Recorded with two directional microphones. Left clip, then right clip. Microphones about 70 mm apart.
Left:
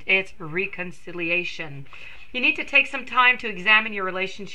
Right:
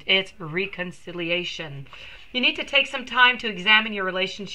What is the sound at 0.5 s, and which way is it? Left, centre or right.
A woman's voice, left.